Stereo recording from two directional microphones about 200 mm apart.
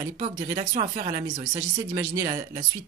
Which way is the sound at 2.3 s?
40° right (ahead or behind).